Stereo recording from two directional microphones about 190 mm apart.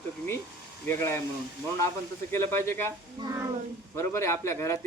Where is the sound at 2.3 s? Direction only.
15° left (ahead or behind).